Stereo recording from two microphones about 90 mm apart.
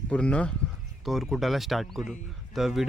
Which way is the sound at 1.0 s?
Centre (ahead or behind).